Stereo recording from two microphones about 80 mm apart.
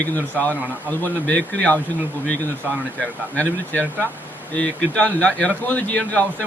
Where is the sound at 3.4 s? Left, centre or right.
Centre.